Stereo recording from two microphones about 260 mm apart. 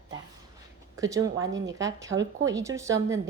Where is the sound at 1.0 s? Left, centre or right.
Centre.